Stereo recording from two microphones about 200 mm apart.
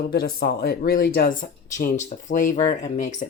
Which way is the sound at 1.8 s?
40° left (ahead or behind).